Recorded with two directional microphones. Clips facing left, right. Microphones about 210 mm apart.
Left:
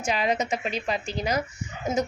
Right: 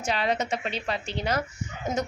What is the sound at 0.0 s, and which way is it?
A woman's voice, 10° left (ahead or behind).